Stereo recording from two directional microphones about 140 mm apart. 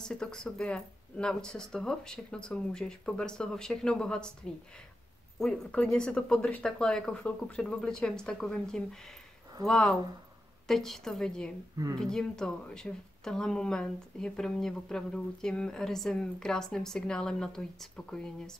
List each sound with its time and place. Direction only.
0.0 s speech: 5° left (ahead or behind)
11.7 s speech: 25° right (ahead or behind)
12.0 s speech: 5° left (ahead or behind)